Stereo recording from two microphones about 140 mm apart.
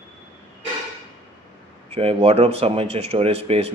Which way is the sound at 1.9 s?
45° right (ahead or behind).